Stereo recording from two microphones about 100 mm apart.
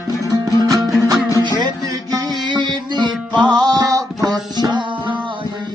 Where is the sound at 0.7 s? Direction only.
35° right (ahead or behind).